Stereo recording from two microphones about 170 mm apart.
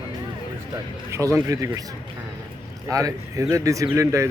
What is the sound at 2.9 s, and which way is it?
Speech, 20° right (ahead or behind).